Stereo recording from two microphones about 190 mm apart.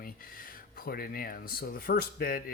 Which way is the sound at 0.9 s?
50° left (ahead or behind).